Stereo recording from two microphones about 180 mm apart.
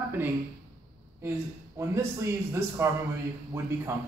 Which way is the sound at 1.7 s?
15° right (ahead or behind).